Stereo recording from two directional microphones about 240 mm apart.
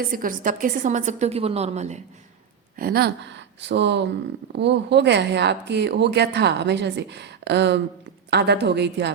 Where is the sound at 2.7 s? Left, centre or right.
Right.